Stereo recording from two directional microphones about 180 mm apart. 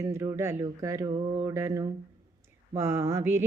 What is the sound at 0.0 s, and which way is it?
Speech, 15° right (ahead or behind).